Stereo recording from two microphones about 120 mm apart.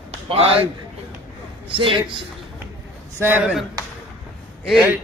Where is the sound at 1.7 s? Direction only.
45° right (ahead or behind).